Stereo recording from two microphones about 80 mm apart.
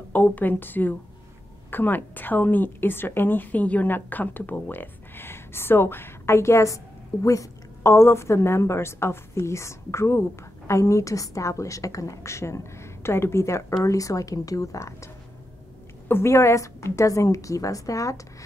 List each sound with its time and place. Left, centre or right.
0.1 s a woman's voice: centre; by 15.0 s left
16.1 s a woman's voice: left